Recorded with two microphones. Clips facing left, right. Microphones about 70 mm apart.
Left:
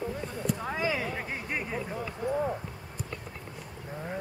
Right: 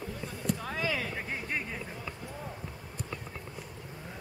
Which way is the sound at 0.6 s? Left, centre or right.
Centre.